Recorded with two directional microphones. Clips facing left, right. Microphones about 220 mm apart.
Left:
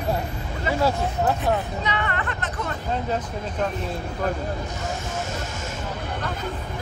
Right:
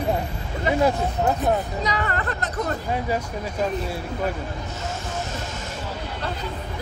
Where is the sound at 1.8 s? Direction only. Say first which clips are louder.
Right 1 dB; 35° right (ahead or behind).